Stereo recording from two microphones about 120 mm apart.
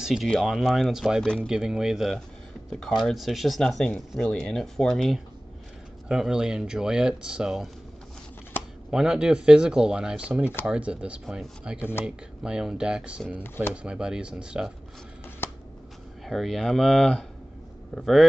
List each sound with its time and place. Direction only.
0.0 s speech: 5° right (ahead or behind)
1.5 s speech: 5° right (ahead or behind)
8.9 s speech: 5° right (ahead or behind)
15.4 s shuffling cards: 20° left (ahead or behind)
16.3 s speech: centre (ahead or behind)